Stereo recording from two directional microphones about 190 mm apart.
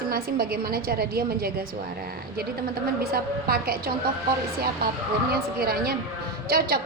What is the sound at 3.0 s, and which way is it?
Speech, 55° right (ahead or behind).